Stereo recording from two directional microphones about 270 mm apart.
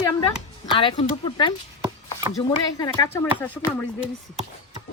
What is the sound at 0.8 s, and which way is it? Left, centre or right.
Speech, centre.